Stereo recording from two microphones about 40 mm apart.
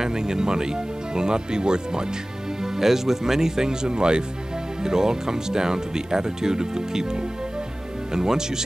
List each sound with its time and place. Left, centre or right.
0.0 s speech: centre